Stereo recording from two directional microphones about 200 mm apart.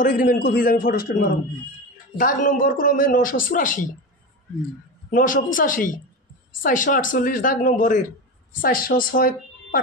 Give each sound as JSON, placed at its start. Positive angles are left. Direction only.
{"t": 0.0, "sound": "a woman's voice", "side_deg": 45}
{"t": 5.1, "sound": "a woman's voice", "side_deg": 45}